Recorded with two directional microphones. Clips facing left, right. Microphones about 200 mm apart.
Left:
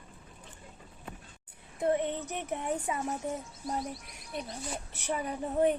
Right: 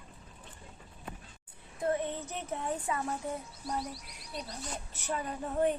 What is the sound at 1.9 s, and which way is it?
Speech, 20° left (ahead or behind).